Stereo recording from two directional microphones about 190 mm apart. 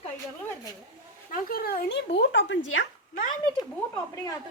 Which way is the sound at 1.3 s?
50° left (ahead or behind).